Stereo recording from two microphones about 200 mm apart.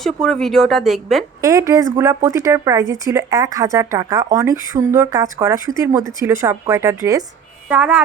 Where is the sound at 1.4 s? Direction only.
15° right (ahead or behind).